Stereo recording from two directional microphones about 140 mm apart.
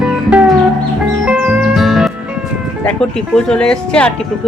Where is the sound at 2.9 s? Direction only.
5° left (ahead or behind).